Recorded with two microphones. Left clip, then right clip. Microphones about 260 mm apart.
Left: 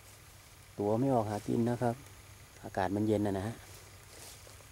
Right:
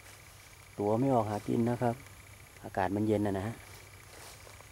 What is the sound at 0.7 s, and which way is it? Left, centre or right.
Speech, centre.